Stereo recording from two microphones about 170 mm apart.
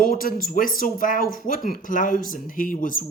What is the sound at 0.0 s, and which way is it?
Speech, 55° left (ahead or behind).